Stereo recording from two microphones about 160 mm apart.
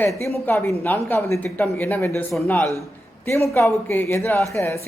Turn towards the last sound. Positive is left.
turn(degrees=15)  # may be behind; listen again after turning